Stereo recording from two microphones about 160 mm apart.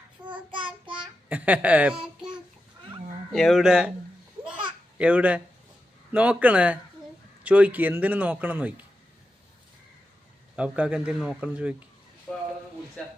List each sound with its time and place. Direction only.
0.5 s child singing: 30° right (ahead or behind)
1.3 s a man's voice: 10° right (ahead or behind)
3.3 s speech: centre (ahead or behind)
4.9 s a man's voice: 10° right (ahead or behind)
10.5 s a man's voice: 5° right (ahead or behind)